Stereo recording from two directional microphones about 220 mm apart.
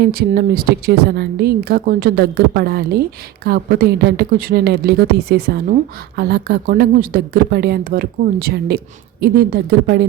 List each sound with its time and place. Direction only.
0.0 s a woman's voice: 45° right (ahead or behind)